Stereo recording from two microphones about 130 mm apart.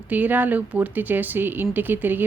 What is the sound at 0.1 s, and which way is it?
Speech, 15° right (ahead or behind).